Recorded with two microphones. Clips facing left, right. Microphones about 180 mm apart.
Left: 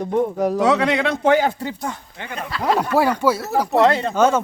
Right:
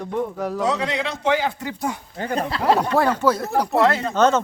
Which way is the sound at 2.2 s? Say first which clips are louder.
Right 6 dB; 40° right (ahead or behind).